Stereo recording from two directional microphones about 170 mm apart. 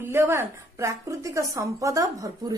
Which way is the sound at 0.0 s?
15° right (ahead or behind).